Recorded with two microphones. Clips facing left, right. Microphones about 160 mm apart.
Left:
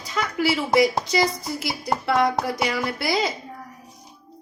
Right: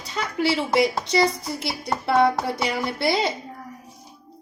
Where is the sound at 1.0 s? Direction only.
30° right (ahead or behind).